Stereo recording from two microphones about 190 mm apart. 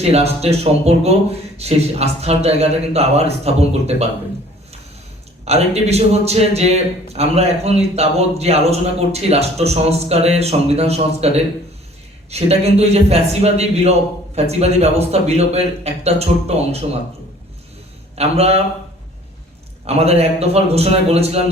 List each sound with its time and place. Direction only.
0.0 s a man's voice: 35° right (ahead or behind)
5.5 s a man's voice: 35° right (ahead or behind)
18.2 s a man's voice: 35° right (ahead or behind)
19.8 s a man's voice: 35° right (ahead or behind)